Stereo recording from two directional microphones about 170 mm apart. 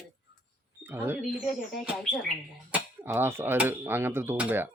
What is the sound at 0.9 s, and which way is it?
Speech, 10° right (ahead or behind).